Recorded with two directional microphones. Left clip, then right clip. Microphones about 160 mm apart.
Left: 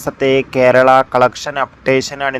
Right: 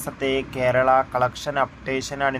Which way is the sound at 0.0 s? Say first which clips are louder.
Left 10 dB; 45° left (ahead or behind).